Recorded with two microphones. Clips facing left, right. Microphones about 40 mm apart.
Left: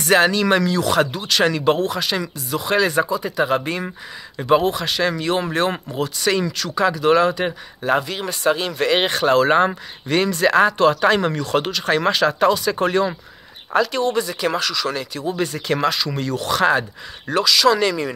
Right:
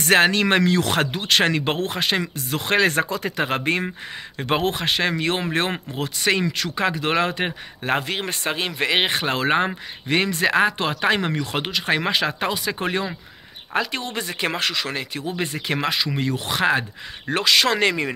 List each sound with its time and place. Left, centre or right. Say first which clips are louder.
0.0 s speech: left 1 dB; right
13.9 s speech: left 7 dB; right
17.3 s speech: left 3 dB; right